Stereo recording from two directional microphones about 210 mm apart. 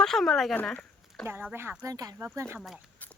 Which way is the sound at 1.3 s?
10° right (ahead or behind).